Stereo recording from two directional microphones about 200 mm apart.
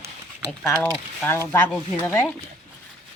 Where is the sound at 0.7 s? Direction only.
10° left (ahead or behind).